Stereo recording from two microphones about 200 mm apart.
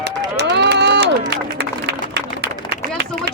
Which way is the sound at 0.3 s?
60° right (ahead or behind).